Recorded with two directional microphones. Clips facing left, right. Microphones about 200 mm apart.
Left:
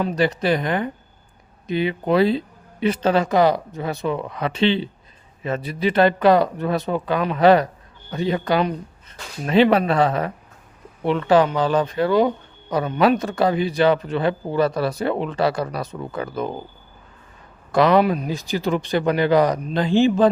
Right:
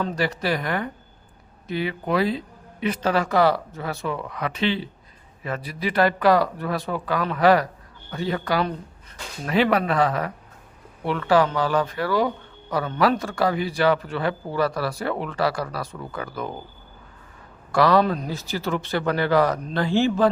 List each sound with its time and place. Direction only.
0.0 s a man's voice: 20° left (ahead or behind)
17.7 s speech: 20° left (ahead or behind)